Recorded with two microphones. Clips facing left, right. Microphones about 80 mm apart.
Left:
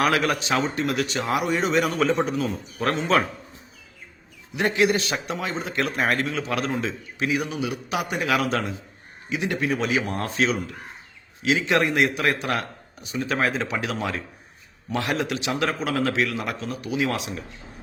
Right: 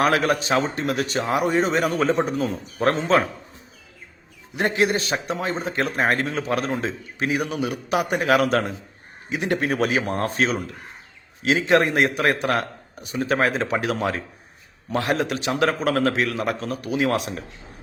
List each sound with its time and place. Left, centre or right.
0.0 s a man's voice: right
4.5 s a man's voice: right